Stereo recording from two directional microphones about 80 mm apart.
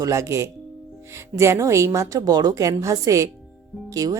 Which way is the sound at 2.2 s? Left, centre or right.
Right.